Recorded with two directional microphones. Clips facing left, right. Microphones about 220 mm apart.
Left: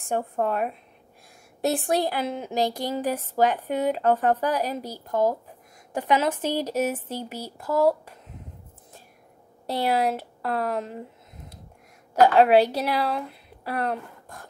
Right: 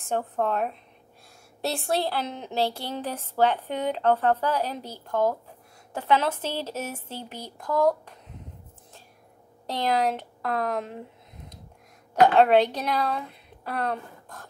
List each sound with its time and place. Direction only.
0.1 s a woman's voice: 10° left (ahead or behind)
9.7 s a woman's voice: 10° left (ahead or behind)